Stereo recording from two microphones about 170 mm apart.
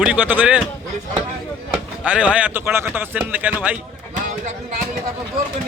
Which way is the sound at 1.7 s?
5° right (ahead or behind).